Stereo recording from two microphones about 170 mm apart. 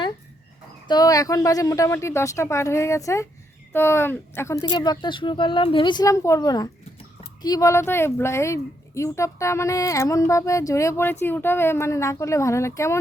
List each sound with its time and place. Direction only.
0.9 s speech: 25° left (ahead or behind)